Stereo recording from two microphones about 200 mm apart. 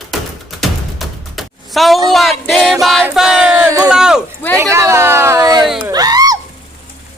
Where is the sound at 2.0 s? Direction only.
Centre (ahead or behind).